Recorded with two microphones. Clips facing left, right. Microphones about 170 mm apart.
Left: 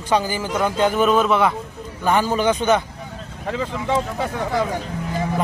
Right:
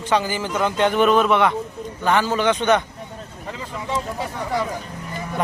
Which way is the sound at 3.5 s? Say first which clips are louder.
Left 6 dB; 80° left.